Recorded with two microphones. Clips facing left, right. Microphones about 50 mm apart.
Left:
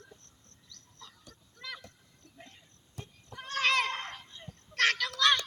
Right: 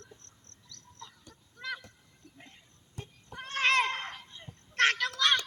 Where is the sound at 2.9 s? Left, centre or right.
Right.